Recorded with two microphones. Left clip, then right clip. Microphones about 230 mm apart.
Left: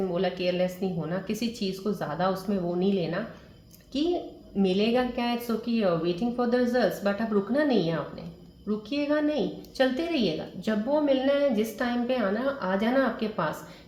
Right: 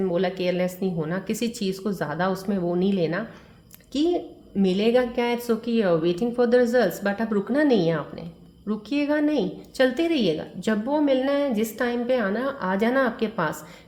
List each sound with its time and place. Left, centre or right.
0.1 s a woman's voice: right
4.5 s a woman's voice: right